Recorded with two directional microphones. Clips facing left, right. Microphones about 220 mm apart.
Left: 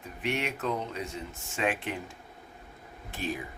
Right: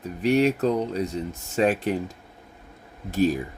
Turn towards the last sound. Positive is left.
turn(degrees=-40)  # may be behind; listen again after turning